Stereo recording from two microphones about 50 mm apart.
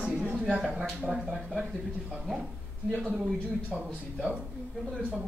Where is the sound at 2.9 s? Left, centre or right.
Right.